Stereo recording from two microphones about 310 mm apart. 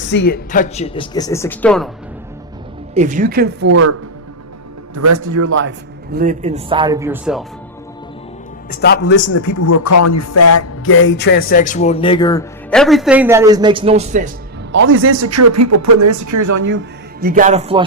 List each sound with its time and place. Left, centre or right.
0.1 s speech: left; by 1.9 s centre
2.9 s speech: right
4.9 s a man's voice: right
6.1 s a man's voice: right; by 7.4 s centre
8.7 s a man's voice: left
9.3 s speech: left; by 14.3 s right
14.7 s speech: right
16.6 s speech: right